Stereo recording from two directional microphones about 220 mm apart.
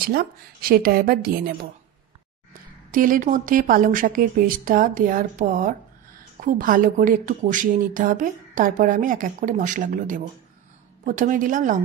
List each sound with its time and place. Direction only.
0.1 s a woman's voice: 40° right (ahead or behind)